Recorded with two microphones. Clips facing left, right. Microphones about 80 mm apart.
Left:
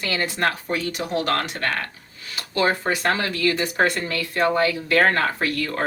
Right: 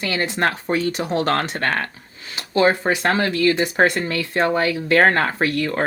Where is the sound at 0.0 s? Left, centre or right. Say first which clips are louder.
Right 2 dB; right.